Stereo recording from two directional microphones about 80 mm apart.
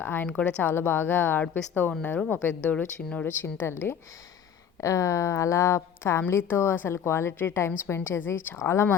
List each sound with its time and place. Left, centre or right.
0.0 s a woman's voice: left
0.3 s a woman's voice: centre
0.6 s a woman's voice: left
3.2 s a woman's voice: left
4.8 s a woman's voice: left